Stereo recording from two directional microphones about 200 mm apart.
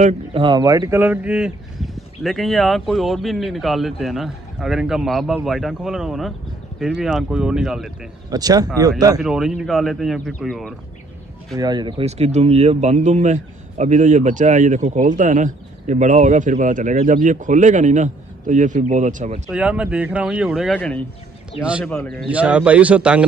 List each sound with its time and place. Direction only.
0.0 s speech: 25° right (ahead or behind); by 7.9 s centre (ahead or behind)
8.3 s speech: 20° right (ahead or behind)
9.2 s speech: 5° right (ahead or behind)
11.5 s speech: 20° right (ahead or behind); by 19.4 s 35° right (ahead or behind)
19.5 s speech: 5° right (ahead or behind)
21.5 s speech: 5° right (ahead or behind)
22.3 s a man's voice: 5° right (ahead or behind)